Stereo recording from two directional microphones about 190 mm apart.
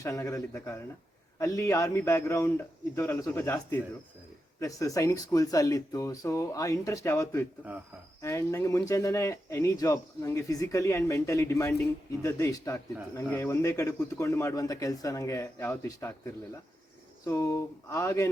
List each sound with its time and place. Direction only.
0.0 s speech: 15° left (ahead or behind)